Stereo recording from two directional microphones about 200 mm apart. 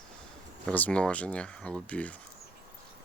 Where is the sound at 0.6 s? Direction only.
5° left (ahead or behind).